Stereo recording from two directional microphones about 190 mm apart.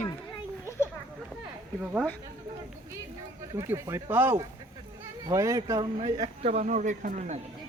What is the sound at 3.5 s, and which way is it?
Speech, 15° right (ahead or behind).